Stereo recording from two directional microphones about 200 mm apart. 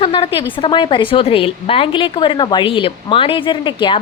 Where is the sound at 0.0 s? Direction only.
25° left (ahead or behind).